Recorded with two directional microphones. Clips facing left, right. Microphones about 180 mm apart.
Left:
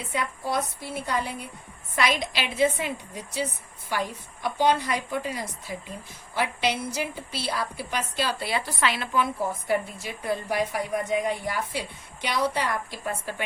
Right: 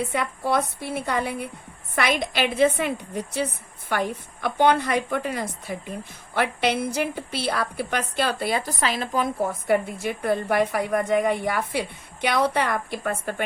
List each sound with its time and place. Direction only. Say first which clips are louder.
0.1 s a woman's voice: right 4 dB; 65° right (ahead or behind)